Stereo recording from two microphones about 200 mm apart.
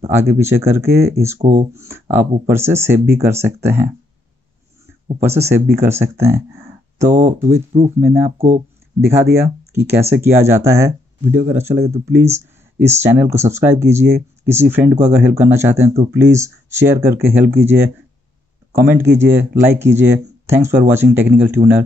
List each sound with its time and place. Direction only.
0.1 s speech: 10° right (ahead or behind)
1.4 s speech: 30° right (ahead or behind)
1.8 s speech: 10° right (ahead or behind)
5.2 s speech: 10° right (ahead or behind)